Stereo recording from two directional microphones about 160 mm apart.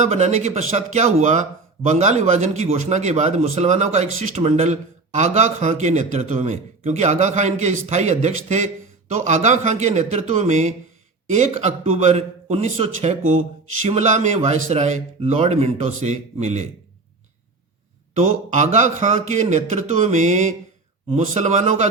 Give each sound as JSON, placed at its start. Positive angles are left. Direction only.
{"t": 0.0, "sound": "speech", "side_deg": -45}
{"t": 18.3, "sound": "speech", "side_deg": -50}